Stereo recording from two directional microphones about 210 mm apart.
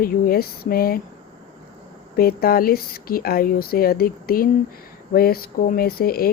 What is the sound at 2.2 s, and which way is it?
Speech, 45° left (ahead or behind).